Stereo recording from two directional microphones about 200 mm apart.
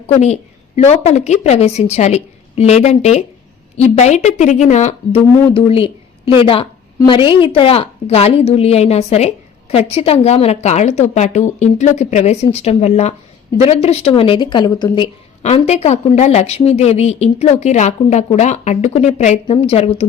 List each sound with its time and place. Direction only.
0.8 s a woman's voice: 35° left (ahead or behind)